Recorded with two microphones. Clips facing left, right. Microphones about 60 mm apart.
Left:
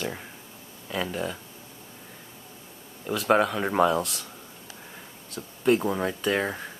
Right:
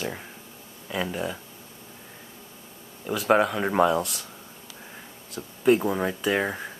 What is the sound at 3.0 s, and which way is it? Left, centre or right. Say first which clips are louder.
Speech: right 1 dB; centre.